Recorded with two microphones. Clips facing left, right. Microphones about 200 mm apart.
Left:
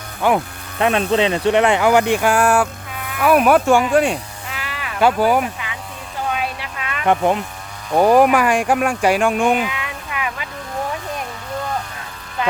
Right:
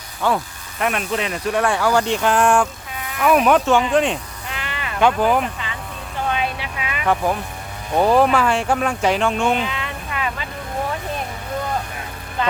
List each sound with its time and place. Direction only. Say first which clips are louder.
0.2 s speech: left 3 dB; 15° left (ahead or behind)
0.8 s speech: left 6 dB; 30° left (ahead or behind); by 5.7 s 10° left (ahead or behind)
6.3 s a sound: right 1 dB; centre (ahead or behind)
7.1 s speech: left 4 dB; 20° left (ahead or behind)